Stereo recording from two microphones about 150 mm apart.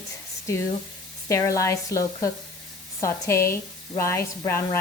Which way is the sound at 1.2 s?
20° left (ahead or behind).